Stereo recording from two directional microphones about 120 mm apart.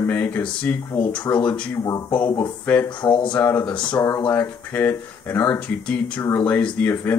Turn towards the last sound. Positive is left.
turn(degrees=15)  # may be behind; listen again after turning